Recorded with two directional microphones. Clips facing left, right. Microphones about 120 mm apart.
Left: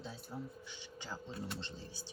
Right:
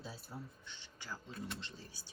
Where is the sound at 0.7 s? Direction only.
15° left (ahead or behind).